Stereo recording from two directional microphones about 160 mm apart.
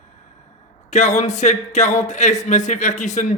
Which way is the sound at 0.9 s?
45° left (ahead or behind).